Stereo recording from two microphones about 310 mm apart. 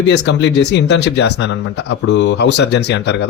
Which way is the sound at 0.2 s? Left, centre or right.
Left.